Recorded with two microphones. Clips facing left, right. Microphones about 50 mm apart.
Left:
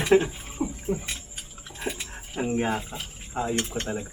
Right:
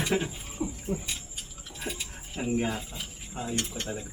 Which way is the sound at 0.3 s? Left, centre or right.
Left.